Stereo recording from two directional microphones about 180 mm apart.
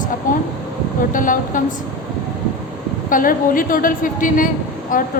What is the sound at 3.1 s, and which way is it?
A woman's voice, 50° left (ahead or behind).